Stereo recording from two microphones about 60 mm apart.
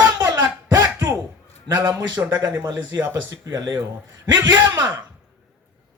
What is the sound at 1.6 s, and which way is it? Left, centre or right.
A man's voice, right.